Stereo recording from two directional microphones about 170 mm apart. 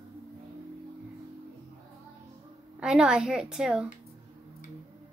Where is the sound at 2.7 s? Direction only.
5° right (ahead or behind).